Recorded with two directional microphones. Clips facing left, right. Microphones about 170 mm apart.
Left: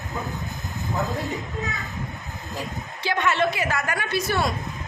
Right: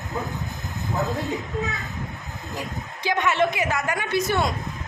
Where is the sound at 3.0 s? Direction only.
15° right (ahead or behind).